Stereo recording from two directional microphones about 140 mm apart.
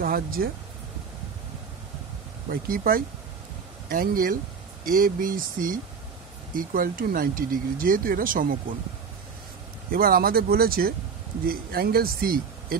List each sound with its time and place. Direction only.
0.0 s speech: 90° right
2.5 s speech: 90° right
9.9 s speech: 90° right